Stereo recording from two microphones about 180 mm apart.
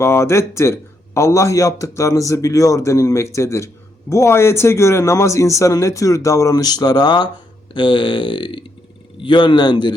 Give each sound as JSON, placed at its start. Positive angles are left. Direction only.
{"t": 0.0, "sound": "speech", "side_deg": 15}